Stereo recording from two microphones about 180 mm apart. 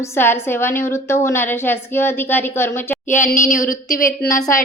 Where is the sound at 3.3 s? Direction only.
45° left (ahead or behind).